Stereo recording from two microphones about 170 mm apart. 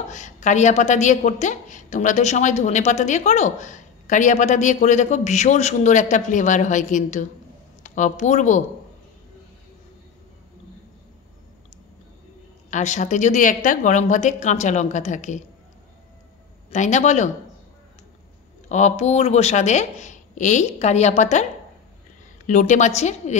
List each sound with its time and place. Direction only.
0.1 s a woman's voice: 45° left (ahead or behind)
12.6 s a woman's voice: 45° left (ahead or behind)
16.7 s a woman's voice: 45° left (ahead or behind)
18.7 s a woman's voice: 45° left (ahead or behind)
22.5 s a woman's voice: 45° left (ahead or behind)